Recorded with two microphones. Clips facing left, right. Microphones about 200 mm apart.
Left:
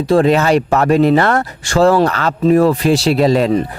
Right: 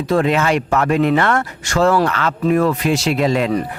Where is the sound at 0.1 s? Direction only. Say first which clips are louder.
Left 5 dB; 35° left (ahead or behind).